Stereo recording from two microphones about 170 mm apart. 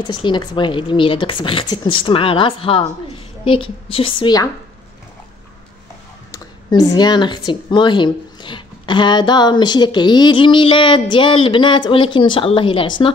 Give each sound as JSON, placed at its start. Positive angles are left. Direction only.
{"t": 0.0, "sound": "speech", "side_deg": 25}
{"t": 6.3, "sound": "speech", "side_deg": 20}